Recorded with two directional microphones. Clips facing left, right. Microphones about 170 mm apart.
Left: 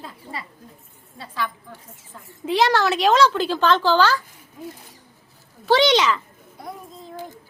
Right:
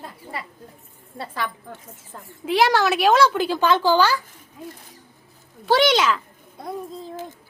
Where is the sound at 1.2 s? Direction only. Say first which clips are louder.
Even; 60° right (ahead or behind).